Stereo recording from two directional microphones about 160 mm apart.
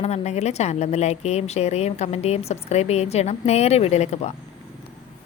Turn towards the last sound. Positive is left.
turn(degrees=45)  # may be behind; listen again after turning